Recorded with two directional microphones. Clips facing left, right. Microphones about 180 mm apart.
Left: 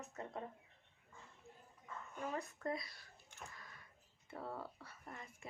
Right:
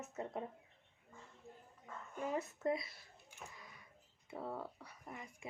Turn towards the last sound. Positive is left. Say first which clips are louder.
# right 2 dB
turn(degrees=-15)  # may be behind; listen again after turning